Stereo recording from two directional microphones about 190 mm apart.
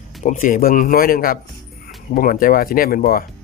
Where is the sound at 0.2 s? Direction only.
45° left (ahead or behind).